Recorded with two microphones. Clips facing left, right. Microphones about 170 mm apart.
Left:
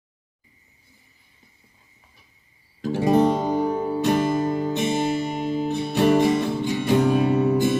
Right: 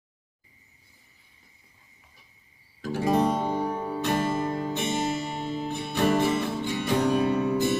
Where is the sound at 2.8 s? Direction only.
20° left (ahead or behind).